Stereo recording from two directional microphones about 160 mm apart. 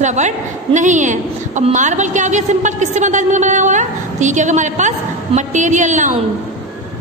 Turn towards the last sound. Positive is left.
turn(degrees=-50)  # may be behind; listen again after turning